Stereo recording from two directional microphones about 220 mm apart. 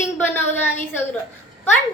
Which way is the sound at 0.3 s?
10° left (ahead or behind).